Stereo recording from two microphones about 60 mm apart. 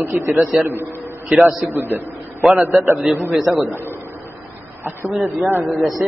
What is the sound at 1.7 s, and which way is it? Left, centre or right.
Speech, right.